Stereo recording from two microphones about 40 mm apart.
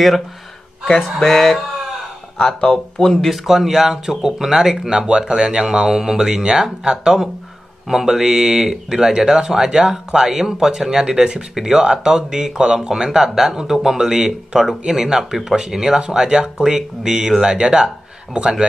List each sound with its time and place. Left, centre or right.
0.8 s speech: centre
3.0 s speech: centre
3.4 s speech: centre
16.2 s speech: centre